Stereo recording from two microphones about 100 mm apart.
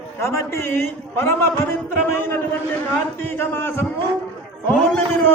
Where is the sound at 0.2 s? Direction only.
25° left (ahead or behind).